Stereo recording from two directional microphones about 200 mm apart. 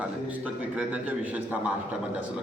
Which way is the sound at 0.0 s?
5° right (ahead or behind).